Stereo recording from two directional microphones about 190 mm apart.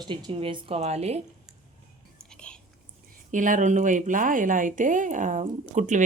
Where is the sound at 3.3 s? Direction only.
45° right (ahead or behind).